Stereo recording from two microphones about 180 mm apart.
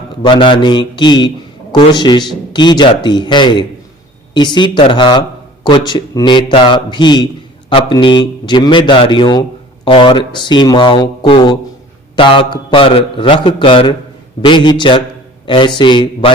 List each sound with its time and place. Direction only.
0.2 s a man's voice: 25° left (ahead or behind)